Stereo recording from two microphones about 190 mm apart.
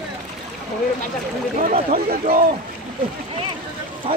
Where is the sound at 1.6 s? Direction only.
40° right (ahead or behind).